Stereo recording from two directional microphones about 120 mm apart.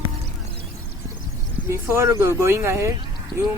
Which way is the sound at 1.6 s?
25° right (ahead or behind).